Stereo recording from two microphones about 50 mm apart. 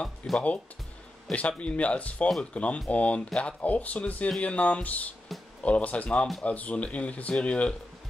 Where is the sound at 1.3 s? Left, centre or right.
Left.